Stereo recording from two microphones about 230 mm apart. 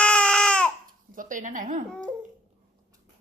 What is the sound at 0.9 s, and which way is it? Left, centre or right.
Dog, right.